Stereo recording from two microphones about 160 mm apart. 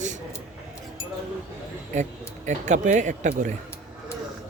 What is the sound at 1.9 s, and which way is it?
Speech, 50° right (ahead or behind).